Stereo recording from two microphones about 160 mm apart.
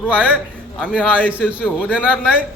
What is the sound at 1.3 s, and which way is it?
Speech, 10° right (ahead or behind).